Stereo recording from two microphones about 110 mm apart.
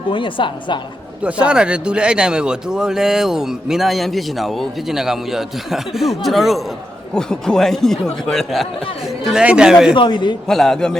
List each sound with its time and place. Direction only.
0.1 s a woman's voice: 50° left (ahead or behind)
1.2 s a man's voice: 10° right (ahead or behind)
9.9 s a woman's voice: 45° left (ahead or behind)
10.4 s speech: 5° left (ahead or behind)